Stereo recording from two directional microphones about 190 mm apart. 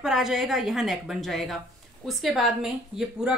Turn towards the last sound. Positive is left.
turn(degrees=-5)  # may be behind; listen again after turning